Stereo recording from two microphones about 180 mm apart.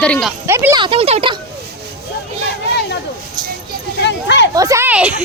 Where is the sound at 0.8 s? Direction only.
30° right (ahead or behind).